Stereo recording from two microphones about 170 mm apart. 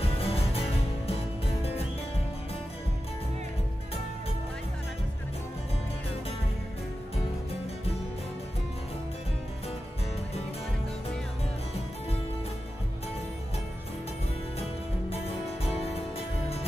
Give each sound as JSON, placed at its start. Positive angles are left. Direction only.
{"t": 0.0, "sound": "music", "side_deg": 35}
{"t": 16.2, "sound": "music", "side_deg": 35}